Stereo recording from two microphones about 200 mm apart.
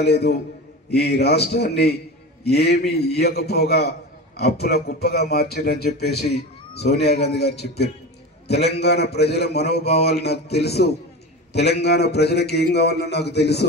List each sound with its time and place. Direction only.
0.0 s a man's voice: 55° left (ahead or behind)